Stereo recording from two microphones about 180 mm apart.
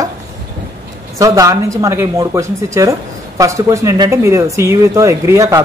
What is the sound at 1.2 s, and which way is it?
Speech, 20° right (ahead or behind).